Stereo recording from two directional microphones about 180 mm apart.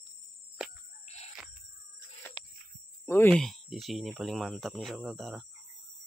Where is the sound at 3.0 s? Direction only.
10° left (ahead or behind).